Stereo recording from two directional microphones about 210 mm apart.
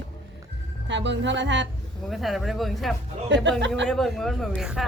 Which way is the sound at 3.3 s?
60° right (ahead or behind).